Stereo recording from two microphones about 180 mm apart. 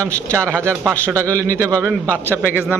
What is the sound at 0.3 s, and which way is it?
Speech, 15° right (ahead or behind).